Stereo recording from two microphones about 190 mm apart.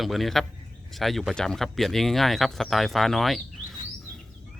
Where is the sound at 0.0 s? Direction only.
Centre (ahead or behind).